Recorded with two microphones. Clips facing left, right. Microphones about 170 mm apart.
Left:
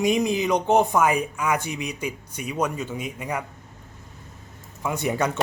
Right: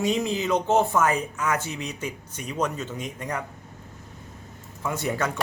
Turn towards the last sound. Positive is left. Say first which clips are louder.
# left 3 dB
turn(degrees=15)  # may be behind; listen again after turning